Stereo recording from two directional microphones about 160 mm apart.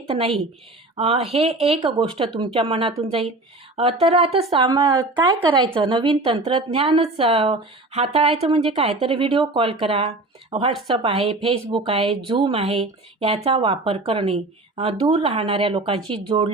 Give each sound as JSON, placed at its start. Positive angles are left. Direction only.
{"t": 0.1, "sound": "a woman's voice", "side_deg": -35}